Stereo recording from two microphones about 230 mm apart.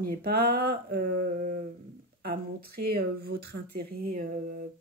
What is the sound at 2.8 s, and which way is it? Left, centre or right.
Speech, right.